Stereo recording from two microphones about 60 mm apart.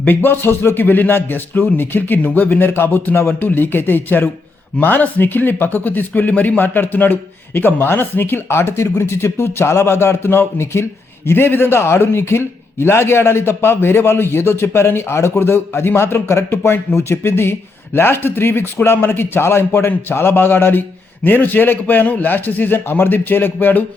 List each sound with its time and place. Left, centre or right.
0.0 s speech: left